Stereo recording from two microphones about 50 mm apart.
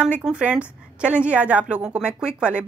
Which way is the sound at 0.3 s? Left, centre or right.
Right.